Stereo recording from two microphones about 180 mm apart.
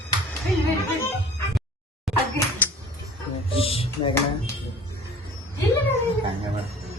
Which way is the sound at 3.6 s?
30° left (ahead or behind).